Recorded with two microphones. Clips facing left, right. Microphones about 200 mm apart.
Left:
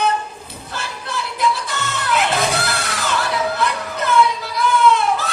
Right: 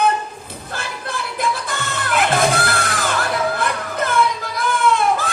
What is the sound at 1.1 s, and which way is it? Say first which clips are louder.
Music: left 3 dB; 50° right (ahead or behind).